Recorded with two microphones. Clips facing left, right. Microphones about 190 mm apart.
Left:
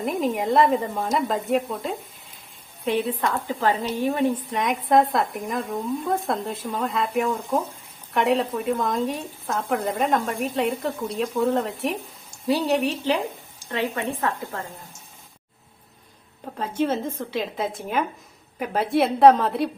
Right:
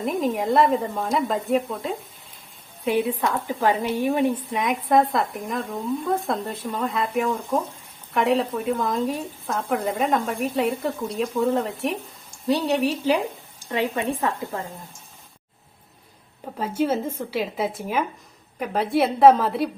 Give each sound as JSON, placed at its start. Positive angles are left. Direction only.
{"t": 0.0, "sound": "a woman's voice", "side_deg": 0}
{"t": 4.5, "sound": "a woman's voice", "side_deg": 0}
{"t": 13.7, "sound": "a woman's voice", "side_deg": -15}
{"t": 16.6, "sound": "a woman's voice", "side_deg": -5}